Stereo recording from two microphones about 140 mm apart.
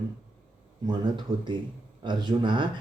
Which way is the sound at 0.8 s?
35° right (ahead or behind).